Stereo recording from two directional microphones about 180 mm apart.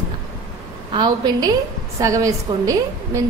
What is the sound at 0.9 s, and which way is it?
A woman's voice, 25° right (ahead or behind).